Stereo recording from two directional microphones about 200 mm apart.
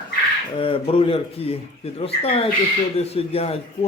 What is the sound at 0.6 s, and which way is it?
Speech, 25° left (ahead or behind).